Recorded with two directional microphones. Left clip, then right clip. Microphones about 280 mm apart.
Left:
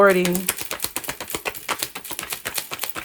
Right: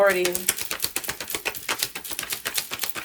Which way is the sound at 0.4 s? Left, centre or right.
Centre.